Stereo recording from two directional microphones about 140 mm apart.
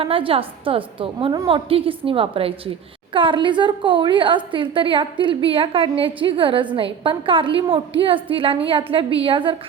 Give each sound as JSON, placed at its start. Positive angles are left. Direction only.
{"t": 0.0, "sound": "a woman's voice", "side_deg": -40}